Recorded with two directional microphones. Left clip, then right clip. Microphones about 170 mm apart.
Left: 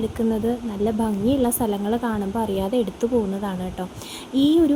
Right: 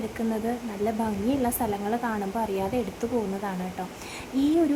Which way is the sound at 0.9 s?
25° left (ahead or behind).